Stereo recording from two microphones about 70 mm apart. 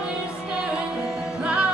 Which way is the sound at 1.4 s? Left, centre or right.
Centre.